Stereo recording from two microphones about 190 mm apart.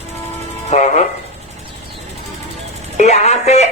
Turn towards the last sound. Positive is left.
turn(degrees=35)  # may be behind; listen again after turning